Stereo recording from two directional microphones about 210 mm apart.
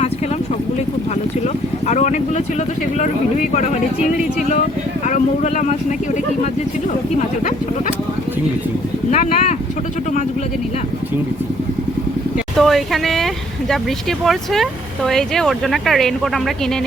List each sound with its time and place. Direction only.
1.9 s speech: 35° left (ahead or behind)
9.0 s speech: 35° left (ahead or behind)
12.5 s speech: centre (ahead or behind)